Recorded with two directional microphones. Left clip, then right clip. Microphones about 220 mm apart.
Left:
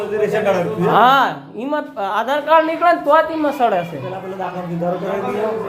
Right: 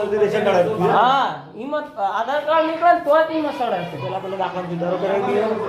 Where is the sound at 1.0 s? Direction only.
50° left (ahead or behind).